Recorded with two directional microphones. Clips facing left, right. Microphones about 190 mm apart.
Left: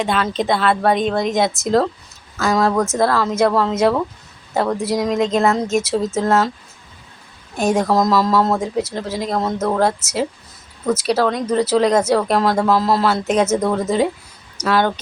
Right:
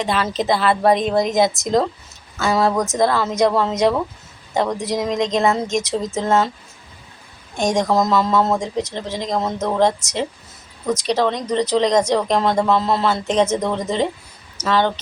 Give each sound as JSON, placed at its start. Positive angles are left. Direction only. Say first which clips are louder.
{"t": 0.0, "sound": "speech", "louder": "left 1 dB", "side_deg": 0}
{"t": 2.7, "sound": "speech", "louder": "left 2 dB", "side_deg": -15}
{"t": 3.0, "sound": "speech", "louder": "right 1 dB", "side_deg": 0}
{"t": 7.5, "sound": "speech", "louder": "left 1 dB", "side_deg": 5}